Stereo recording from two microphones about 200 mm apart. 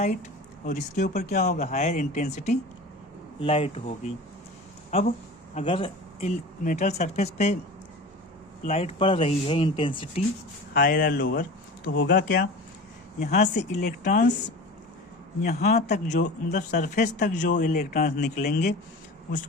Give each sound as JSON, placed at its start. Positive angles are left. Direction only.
{"t": 0.6, "sound": "a man's voice", "side_deg": 35}
{"t": 8.7, "sound": "speech", "side_deg": 30}
{"t": 10.8, "sound": "speech", "side_deg": 50}
{"t": 11.9, "sound": "speech", "side_deg": 60}
{"t": 13.1, "sound": "a man's voice", "side_deg": 35}
{"t": 15.4, "sound": "speech", "side_deg": 50}
{"t": 15.9, "sound": "a man's voice", "side_deg": 40}